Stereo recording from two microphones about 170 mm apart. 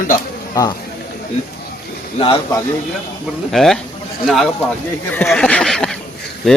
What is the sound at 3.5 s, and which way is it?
Speech, centre (ahead or behind).